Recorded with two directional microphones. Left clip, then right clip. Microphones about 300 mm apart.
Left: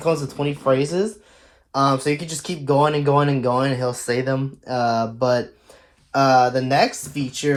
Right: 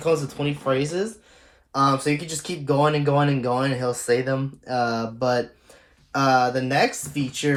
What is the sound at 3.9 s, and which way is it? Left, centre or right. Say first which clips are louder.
Speech: even; left.